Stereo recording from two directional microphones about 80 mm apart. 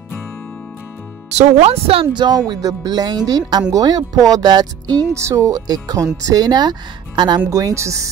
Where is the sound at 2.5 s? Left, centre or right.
Right.